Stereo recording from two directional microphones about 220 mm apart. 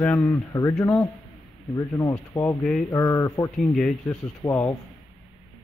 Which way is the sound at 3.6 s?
Centre (ahead or behind).